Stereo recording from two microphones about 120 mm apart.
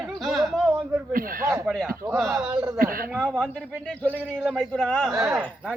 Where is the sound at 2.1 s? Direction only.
5° right (ahead or behind).